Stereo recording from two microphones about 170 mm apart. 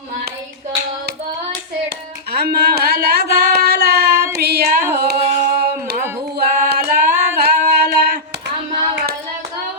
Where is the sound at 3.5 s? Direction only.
70° right (ahead or behind).